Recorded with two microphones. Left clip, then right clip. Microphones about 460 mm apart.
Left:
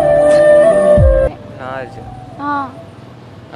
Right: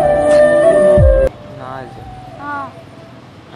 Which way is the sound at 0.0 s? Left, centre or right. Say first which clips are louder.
Left 1 dB; centre.